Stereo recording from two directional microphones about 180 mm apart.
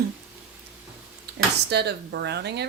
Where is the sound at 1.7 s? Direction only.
65° right (ahead or behind).